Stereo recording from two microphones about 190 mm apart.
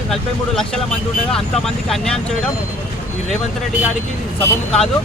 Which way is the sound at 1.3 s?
5° left (ahead or behind).